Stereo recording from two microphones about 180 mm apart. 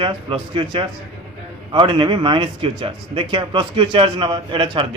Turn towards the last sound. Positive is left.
turn(degrees=-30)  # may be behind; listen again after turning